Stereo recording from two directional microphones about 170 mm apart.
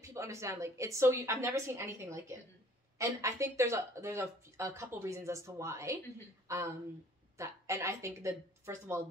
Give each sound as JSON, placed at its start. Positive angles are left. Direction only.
{"t": 0.0, "sound": "a woman's voice", "side_deg": -15}